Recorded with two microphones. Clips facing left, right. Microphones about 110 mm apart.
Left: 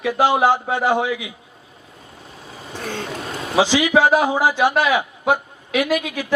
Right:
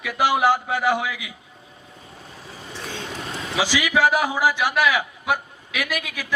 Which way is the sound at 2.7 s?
50° left (ahead or behind).